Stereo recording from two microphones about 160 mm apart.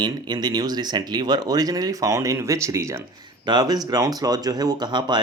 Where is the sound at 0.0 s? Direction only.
25° right (ahead or behind).